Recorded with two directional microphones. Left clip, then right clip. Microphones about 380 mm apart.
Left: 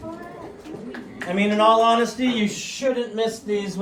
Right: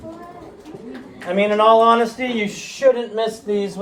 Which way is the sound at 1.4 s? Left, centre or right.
Right.